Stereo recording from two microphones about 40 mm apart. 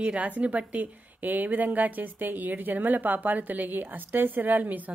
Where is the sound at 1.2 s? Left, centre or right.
Right.